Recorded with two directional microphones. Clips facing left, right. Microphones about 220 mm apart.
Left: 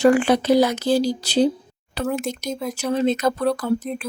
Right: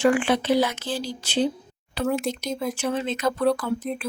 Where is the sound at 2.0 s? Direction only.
Centre (ahead or behind).